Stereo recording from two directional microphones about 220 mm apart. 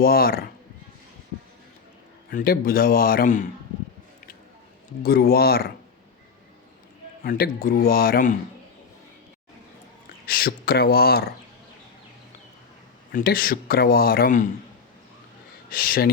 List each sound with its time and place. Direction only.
0.0 s speech: 40° left (ahead or behind)
2.3 s speech: 40° left (ahead or behind)
5.0 s speech: 45° left (ahead or behind)
7.3 s speech: 40° left (ahead or behind)
10.2 s speech: 40° left (ahead or behind)
13.1 s speech: 40° left (ahead or behind)
15.7 s speech: 40° left (ahead or behind)